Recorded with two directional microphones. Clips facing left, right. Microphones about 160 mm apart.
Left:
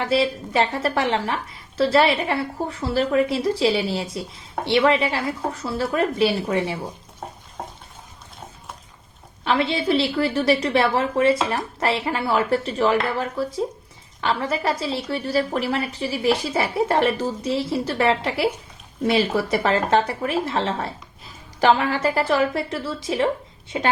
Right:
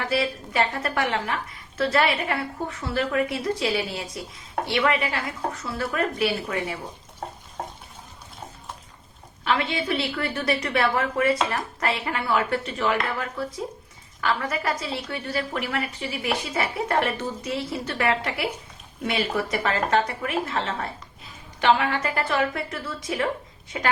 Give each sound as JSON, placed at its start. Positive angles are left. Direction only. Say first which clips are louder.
{"t": 0.0, "sound": "a woman's voice", "louder": "left 5 dB", "side_deg": 25}
{"t": 9.4, "sound": "a woman's voice", "louder": "left 3 dB", "side_deg": 30}